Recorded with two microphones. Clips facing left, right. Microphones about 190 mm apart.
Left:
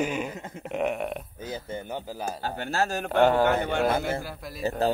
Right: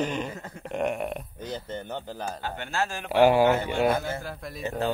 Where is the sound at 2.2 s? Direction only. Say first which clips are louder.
Left 2 dB; 40° left (ahead or behind).